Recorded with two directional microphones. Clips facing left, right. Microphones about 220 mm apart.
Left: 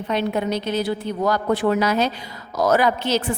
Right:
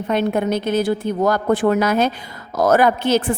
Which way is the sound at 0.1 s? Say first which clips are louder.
Right 4 dB; 50° right (ahead or behind).